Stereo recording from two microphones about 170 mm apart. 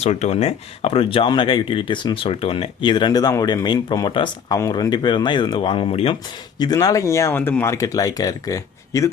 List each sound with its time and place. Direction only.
0.0 s speech: 40° left (ahead or behind)
6.6 s speech: 25° left (ahead or behind)